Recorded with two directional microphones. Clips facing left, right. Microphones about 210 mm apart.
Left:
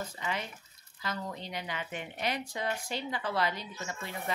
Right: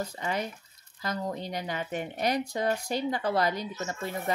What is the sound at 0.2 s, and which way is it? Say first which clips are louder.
Speech: right 5 dB; 45° right (ahead or behind).